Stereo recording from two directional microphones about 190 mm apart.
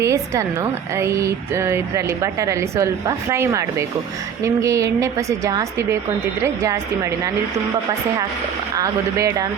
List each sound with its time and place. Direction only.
0.0 s speech: 15° right (ahead or behind)
8.7 s speech: 15° right (ahead or behind)